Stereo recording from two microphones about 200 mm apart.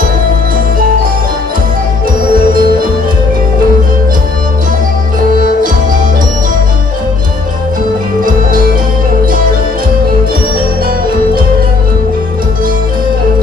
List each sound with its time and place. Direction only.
2.5 s music: 45° right (ahead or behind)